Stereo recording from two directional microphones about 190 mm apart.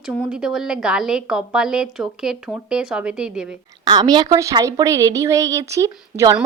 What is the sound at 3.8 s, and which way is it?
A woman's voice, 20° right (ahead or behind).